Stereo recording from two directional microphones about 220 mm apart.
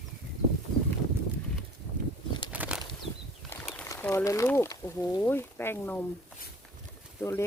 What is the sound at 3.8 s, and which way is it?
Speech, 15° left (ahead or behind).